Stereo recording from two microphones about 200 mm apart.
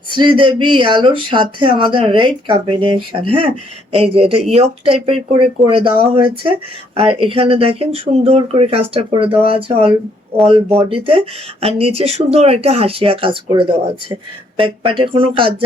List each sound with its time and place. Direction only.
0.1 s speech: 25° right (ahead or behind)